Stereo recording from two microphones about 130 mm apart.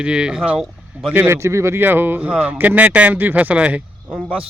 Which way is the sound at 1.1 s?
20° right (ahead or behind).